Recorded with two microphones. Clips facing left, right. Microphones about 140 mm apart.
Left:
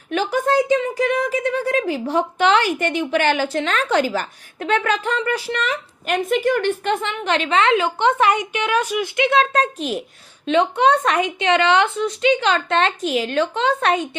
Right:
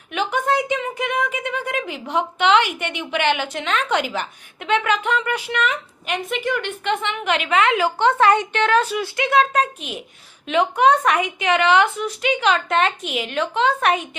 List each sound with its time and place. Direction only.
0.1 s a woman's voice: 35° left (ahead or behind)
9.6 s a woman's voice: 35° left (ahead or behind)